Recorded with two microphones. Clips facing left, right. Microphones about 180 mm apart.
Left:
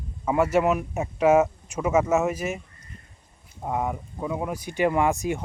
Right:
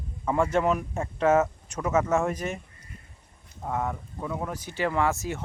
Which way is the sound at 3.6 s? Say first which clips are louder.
Left 2 dB; 15° left (ahead or behind).